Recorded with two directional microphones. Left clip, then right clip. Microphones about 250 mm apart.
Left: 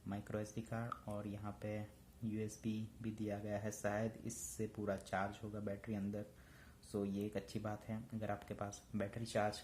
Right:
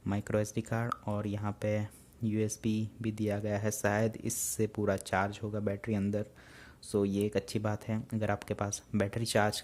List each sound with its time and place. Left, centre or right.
0.0 s speech: right